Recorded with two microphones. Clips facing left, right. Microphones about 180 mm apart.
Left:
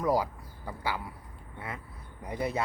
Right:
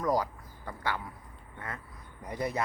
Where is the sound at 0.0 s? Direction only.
10° left (ahead or behind).